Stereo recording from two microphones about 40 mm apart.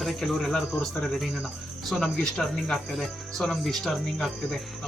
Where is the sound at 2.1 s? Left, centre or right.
Centre.